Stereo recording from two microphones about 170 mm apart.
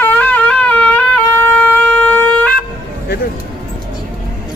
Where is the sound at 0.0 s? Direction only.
10° left (ahead or behind).